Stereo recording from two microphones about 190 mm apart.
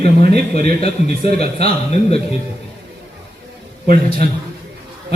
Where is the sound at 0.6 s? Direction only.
35° left (ahead or behind).